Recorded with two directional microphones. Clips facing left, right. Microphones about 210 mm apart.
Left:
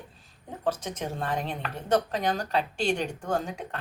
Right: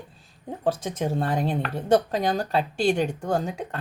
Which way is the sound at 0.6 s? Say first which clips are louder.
Right 4 dB; 35° right (ahead or behind).